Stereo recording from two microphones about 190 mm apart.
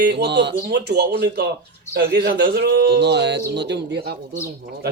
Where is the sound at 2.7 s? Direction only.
65° right (ahead or behind).